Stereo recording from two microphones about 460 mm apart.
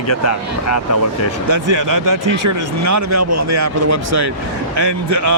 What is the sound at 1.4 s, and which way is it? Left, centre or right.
Speech, right.